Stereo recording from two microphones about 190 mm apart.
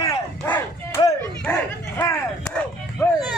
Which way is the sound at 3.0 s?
15° left (ahead or behind).